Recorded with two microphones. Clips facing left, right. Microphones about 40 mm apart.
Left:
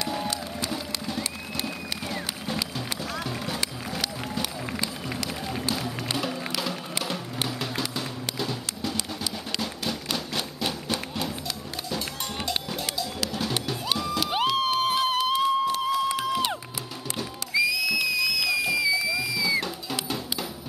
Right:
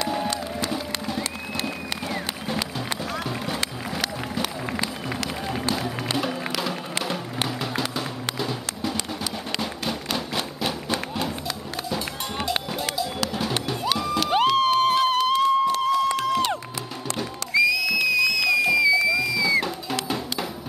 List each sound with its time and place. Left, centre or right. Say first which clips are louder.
0.0 s run: right 4 dB; centre
2.0 s music: right 3 dB; centre
4.4 s run: right 4 dB; right
6.1 s music: right 3 dB; centre